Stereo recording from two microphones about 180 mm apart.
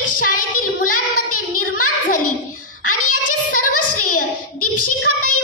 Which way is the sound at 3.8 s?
50° left (ahead or behind).